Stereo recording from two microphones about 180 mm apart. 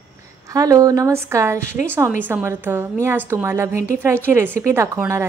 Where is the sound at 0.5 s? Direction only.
20° right (ahead or behind).